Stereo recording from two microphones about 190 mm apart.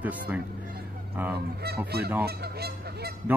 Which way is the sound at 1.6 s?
55° right (ahead or behind).